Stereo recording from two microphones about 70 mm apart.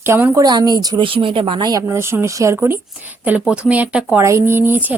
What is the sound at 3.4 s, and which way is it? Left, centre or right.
Speech, centre.